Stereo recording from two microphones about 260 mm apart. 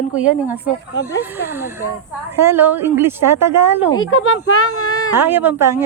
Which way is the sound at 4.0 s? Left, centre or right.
Left.